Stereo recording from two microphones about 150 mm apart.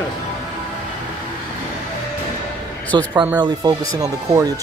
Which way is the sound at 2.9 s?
30° right (ahead or behind).